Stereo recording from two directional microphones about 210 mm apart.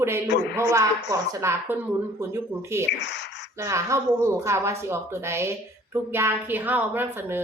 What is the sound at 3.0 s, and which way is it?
Speech, 55° left (ahead or behind).